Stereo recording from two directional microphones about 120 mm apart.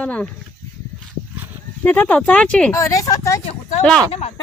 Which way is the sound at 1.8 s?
15° left (ahead or behind).